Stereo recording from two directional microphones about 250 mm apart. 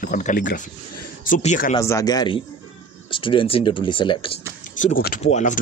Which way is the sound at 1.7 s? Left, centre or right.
Centre.